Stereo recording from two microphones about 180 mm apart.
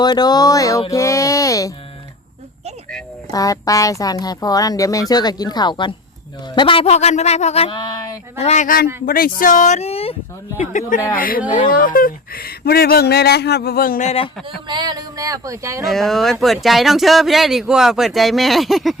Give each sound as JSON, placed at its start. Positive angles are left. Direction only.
{"t": 0.0, "sound": "speech", "side_deg": 25}
{"t": 3.3, "sound": "speech", "side_deg": 20}
{"t": 8.4, "sound": "speech", "side_deg": 40}
{"t": 10.6, "sound": "speech", "side_deg": 45}
{"t": 14.7, "sound": "a sound", "side_deg": -25}
{"t": 15.8, "sound": "speech", "side_deg": 0}